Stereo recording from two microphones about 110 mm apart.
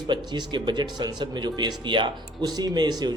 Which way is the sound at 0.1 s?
45° right (ahead or behind).